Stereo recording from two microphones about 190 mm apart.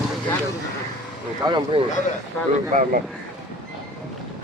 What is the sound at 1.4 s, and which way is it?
Speech, 25° right (ahead or behind).